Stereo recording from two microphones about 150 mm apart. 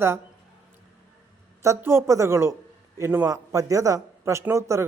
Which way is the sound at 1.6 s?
20° right (ahead or behind).